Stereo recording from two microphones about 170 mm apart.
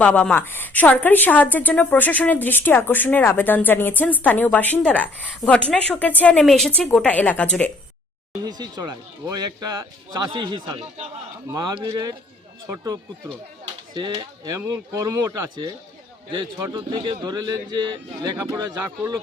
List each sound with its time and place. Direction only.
0.0 s a woman's voice: 10° left (ahead or behind)
8.4 s a man's voice: 25° right (ahead or behind)